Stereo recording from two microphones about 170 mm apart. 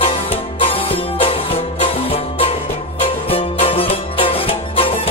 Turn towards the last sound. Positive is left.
turn(degrees=35)  # may be behind; listen again after turning